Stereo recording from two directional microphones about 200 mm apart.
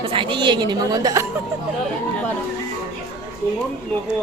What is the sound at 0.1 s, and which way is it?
A woman's voice, 25° right (ahead or behind).